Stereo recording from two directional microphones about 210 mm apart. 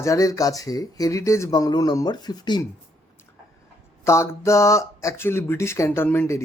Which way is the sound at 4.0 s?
15° left (ahead or behind).